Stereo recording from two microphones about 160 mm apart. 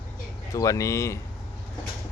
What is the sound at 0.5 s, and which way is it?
Speech, 20° left (ahead or behind).